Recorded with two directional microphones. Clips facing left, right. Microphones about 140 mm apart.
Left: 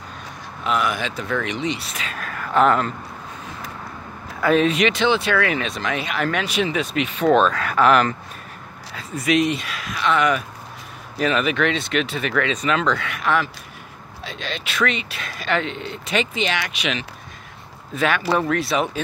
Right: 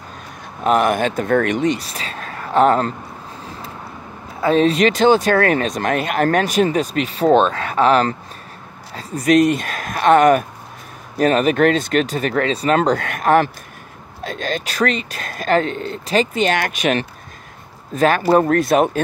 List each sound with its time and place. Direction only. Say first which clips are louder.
0.7 s speech: right 7 dB; 50° right (ahead or behind)
4.4 s speech: right 3 dB; 30° right (ahead or behind); by 18.9 s 50° right (ahead or behind)